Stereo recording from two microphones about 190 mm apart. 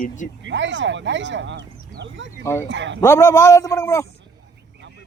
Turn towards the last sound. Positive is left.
turn(degrees=15)  # may be behind; listen again after turning